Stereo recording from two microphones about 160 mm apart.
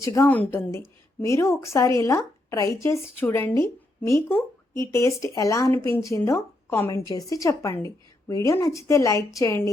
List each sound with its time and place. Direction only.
0.0 s a woman's voice: 20° left (ahead or behind)